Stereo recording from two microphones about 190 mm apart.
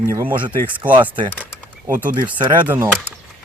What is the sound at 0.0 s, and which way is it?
Speech, 15° right (ahead or behind).